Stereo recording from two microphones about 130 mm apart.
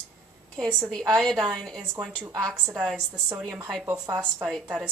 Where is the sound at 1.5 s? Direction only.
5° left (ahead or behind).